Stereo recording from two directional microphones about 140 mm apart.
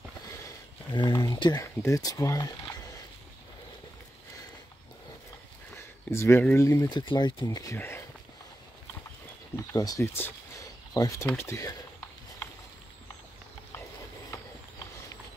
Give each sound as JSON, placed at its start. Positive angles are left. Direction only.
{"t": 0.9, "sound": "speech", "side_deg": 30}
{"t": 6.0, "sound": "speech", "side_deg": 15}
{"t": 9.8, "sound": "speech", "side_deg": 25}